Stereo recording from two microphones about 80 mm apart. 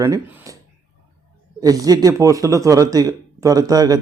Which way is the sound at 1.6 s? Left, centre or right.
Right.